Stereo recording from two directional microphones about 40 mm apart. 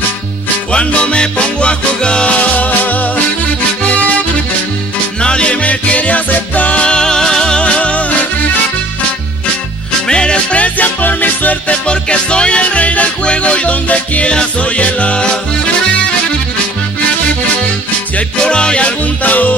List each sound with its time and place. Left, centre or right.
0.7 s music: left
2.3 s music: left
5.2 s music: left
7.0 s music: centre
10.0 s music: left
11.9 s music: left
14.3 s music: left
14.8 s music: left
18.4 s music: left
18.9 s music: left